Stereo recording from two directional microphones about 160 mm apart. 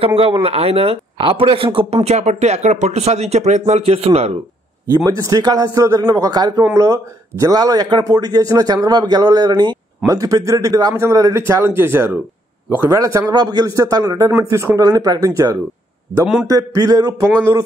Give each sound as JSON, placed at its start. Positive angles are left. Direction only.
{"t": 0.0, "sound": "a man's voice", "side_deg": -35}
{"t": 4.9, "sound": "speech", "side_deg": -20}